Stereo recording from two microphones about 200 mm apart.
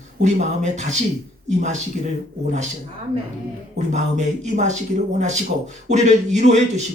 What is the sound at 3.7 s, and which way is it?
Speech, 35° right (ahead or behind).